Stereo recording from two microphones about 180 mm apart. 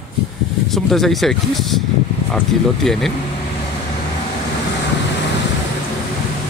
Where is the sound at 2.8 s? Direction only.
Centre (ahead or behind).